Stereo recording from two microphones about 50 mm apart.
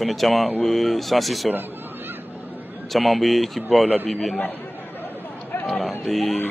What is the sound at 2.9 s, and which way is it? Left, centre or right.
A man's voice, centre.